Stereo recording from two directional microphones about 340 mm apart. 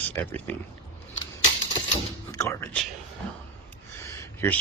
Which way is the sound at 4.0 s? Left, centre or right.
Centre.